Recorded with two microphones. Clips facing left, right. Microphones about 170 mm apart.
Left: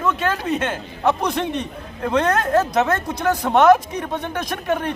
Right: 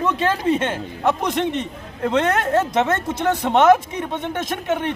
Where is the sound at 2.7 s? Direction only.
25° right (ahead or behind).